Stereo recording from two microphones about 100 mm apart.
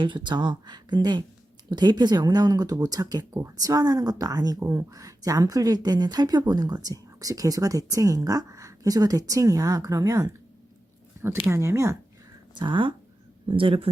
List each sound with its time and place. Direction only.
0.0 s speech: 50° right (ahead or behind); by 10.3 s 35° right (ahead or behind)
11.2 s a sound: 30° right (ahead or behind)
11.5 s speech: 30° right (ahead or behind)
12.5 s speech: 55° right (ahead or behind)